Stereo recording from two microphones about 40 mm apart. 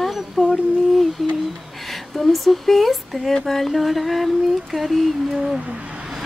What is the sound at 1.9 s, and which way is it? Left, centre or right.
Speech, centre.